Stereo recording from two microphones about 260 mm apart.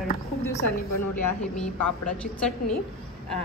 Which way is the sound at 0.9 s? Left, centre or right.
Left.